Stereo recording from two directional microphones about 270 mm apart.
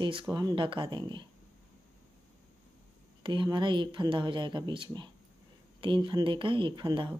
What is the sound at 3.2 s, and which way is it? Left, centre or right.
Speech, centre.